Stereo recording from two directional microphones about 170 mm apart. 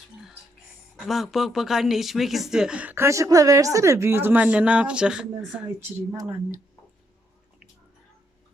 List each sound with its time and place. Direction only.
0.9 s speech: centre (ahead or behind)
6.1 s speech: 20° right (ahead or behind)